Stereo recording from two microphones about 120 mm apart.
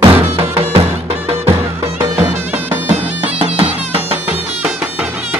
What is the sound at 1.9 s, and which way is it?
Music, 20° right (ahead or behind).